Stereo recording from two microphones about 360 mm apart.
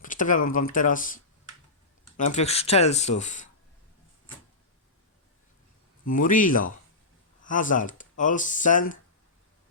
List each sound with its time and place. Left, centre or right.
0.0 s speech: left
2.3 s speech: centre
6.1 s speech: left